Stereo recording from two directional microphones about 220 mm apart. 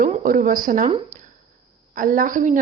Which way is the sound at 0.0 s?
40° right (ahead or behind).